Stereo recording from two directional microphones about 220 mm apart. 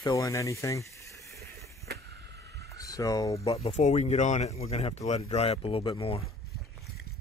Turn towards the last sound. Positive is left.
turn(degrees=25)  # may be behind; listen again after turning